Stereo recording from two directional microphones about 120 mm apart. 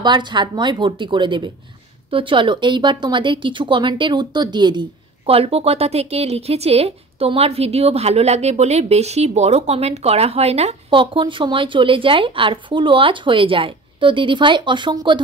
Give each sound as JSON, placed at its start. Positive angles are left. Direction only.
{"t": 0.0, "sound": "speech", "side_deg": -40}
{"t": 5.2, "sound": "speech", "side_deg": -55}
{"t": 10.9, "sound": "speech", "side_deg": -45}